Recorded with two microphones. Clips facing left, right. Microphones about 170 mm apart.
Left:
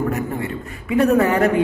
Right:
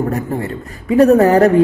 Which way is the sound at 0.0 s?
35° right (ahead or behind).